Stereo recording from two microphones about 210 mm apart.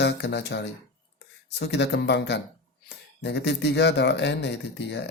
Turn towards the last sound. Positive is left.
turn(degrees=55)  # may be behind; listen again after turning